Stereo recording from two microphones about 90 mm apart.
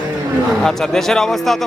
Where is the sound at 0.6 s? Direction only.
5° left (ahead or behind).